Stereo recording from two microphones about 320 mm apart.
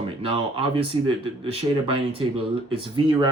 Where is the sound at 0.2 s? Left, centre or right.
Centre.